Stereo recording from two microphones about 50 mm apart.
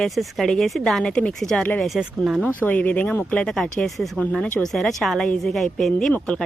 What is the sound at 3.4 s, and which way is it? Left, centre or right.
Speech, centre.